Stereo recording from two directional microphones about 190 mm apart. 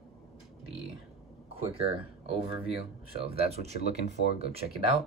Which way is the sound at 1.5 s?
30° right (ahead or behind).